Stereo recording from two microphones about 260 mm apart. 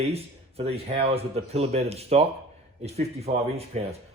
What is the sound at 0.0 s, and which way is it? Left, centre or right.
Speech, right.